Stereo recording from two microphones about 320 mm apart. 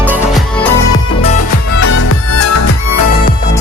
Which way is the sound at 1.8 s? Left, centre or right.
Left.